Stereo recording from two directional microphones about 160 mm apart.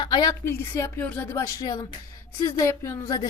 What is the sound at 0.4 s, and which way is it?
Speech, 15° left (ahead or behind).